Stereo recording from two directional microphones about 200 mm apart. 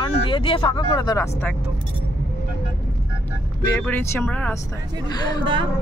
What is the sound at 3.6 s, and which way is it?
Speech, 10° left (ahead or behind).